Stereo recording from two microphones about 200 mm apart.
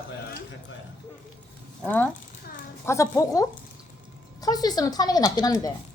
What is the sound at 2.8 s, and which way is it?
A woman's voice, 15° left (ahead or behind).